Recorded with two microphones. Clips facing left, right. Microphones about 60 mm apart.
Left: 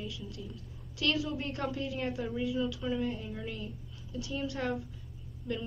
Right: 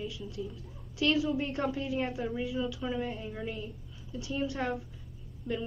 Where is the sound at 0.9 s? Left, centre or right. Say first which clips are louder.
Right 4 dB; right.